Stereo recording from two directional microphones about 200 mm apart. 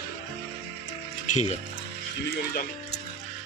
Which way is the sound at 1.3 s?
35° left (ahead or behind).